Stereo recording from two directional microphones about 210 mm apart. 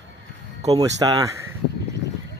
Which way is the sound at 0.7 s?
15° right (ahead or behind).